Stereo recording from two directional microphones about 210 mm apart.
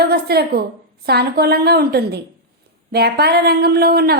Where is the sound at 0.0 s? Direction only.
50° right (ahead or behind).